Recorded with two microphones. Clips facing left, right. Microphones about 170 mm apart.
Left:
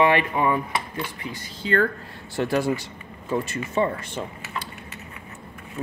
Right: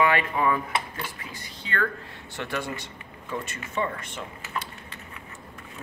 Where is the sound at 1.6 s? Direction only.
35° left (ahead or behind).